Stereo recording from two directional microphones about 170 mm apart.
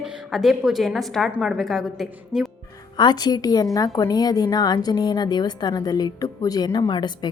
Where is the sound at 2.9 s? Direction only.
25° left (ahead or behind).